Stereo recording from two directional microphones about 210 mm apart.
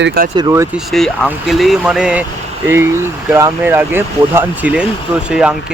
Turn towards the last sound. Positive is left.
turn(degrees=-5)  # may be behind; listen again after turning